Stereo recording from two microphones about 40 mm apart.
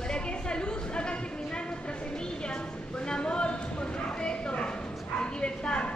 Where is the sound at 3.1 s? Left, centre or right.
Left.